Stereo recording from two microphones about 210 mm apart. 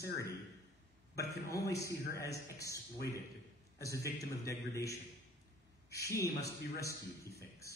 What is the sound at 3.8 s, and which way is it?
A man's voice, 15° left (ahead or behind).